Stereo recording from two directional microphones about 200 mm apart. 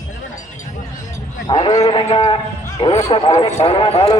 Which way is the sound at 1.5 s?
20° left (ahead or behind).